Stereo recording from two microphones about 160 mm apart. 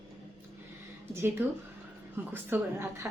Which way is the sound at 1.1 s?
15° right (ahead or behind).